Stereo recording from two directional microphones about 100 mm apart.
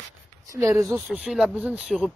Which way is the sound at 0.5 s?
30° right (ahead or behind).